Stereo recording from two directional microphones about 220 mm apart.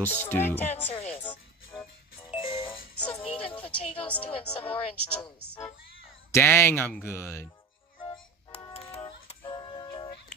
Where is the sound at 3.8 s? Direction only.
25° left (ahead or behind).